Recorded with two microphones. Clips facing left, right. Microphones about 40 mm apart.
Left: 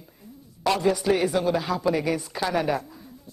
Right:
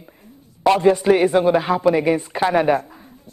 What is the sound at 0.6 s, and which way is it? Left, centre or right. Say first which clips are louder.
Speech: right 8 dB; right.